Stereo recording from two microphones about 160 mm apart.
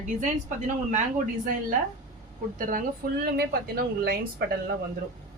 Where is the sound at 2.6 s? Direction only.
60° right (ahead or behind).